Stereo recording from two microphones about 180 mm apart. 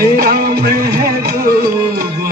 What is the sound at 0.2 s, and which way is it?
Music, 60° right (ahead or behind).